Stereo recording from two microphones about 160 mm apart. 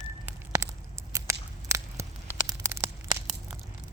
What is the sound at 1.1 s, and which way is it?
Biting, 20° right (ahead or behind).